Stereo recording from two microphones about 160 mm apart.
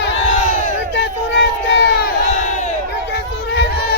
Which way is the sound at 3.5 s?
80° left.